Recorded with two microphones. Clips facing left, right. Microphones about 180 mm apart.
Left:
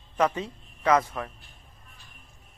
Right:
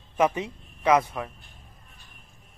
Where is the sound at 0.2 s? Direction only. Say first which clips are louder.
Right 2 dB; 20° right (ahead or behind).